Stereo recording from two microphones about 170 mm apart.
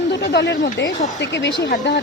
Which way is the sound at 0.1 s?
85° left.